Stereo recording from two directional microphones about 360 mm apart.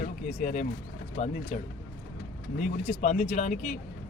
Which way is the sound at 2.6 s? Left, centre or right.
Left.